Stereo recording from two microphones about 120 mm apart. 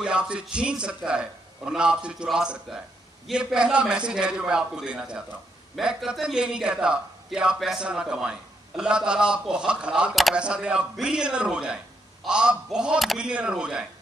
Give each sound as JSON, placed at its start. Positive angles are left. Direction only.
{"t": 0.0, "sound": "a man's voice", "side_deg": -10}